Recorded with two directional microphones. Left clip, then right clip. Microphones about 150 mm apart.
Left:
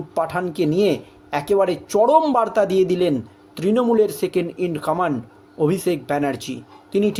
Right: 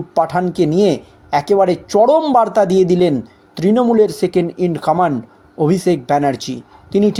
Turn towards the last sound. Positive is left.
turn(degrees=-35)  # may be behind; listen again after turning